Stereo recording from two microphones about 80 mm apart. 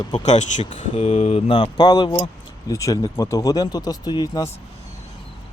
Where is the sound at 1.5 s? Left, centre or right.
Left.